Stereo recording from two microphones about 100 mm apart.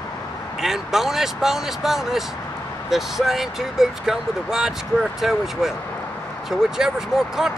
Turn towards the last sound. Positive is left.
turn(degrees=-5)  # may be behind; listen again after turning